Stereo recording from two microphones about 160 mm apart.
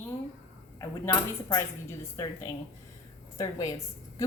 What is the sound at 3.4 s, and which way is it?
Speech, 20° left (ahead or behind).